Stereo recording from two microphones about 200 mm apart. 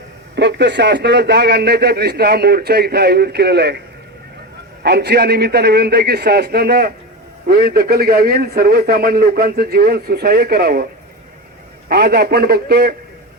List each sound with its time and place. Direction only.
0.3 s a man's voice: 60° right (ahead or behind)
4.8 s a man's voice: 55° right (ahead or behind)
11.9 s a man's voice: 50° right (ahead or behind)